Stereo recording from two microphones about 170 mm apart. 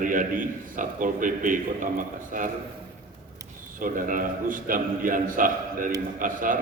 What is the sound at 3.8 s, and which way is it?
A man's voice, 55° right (ahead or behind).